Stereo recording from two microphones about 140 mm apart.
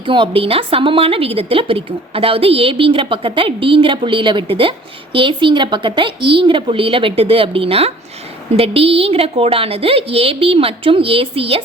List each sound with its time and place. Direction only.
0.0 s a woman's voice: 35° right (ahead or behind)